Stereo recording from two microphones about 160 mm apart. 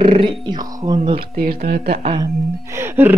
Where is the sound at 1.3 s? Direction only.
65° right (ahead or behind).